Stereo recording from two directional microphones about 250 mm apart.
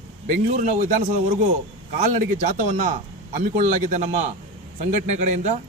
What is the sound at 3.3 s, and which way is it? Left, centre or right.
A man's voice, right.